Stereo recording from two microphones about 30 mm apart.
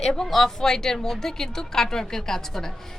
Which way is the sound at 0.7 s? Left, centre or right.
Centre.